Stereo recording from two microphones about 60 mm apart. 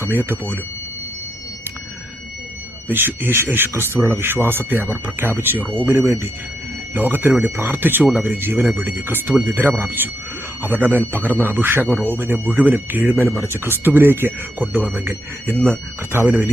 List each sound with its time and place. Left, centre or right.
0.1 s speech: right
2.8 s speech: right